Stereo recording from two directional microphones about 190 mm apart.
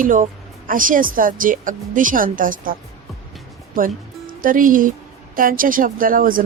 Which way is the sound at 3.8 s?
45° right (ahead or behind).